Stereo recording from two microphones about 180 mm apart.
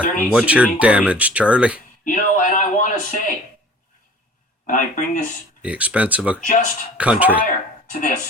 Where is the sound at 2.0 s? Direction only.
45° left (ahead or behind).